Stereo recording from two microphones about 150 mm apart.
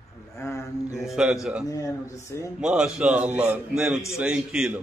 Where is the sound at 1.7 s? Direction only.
20° left (ahead or behind).